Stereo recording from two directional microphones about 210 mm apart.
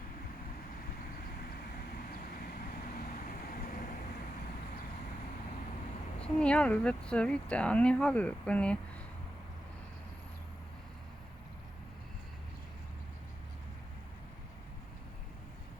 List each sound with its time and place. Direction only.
3.2 s vehicle: 40° left (ahead or behind)
6.2 s speech: 5° left (ahead or behind)